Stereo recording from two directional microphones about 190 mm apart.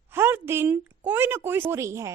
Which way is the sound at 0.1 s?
10° right (ahead or behind).